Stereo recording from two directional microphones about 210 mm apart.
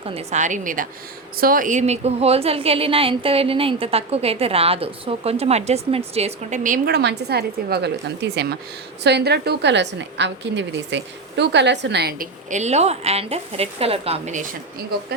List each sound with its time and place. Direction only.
0.0 s a woman's voice: 30° right (ahead or behind)